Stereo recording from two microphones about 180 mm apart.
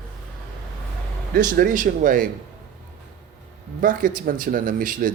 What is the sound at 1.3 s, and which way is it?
Speech, 50° right (ahead or behind).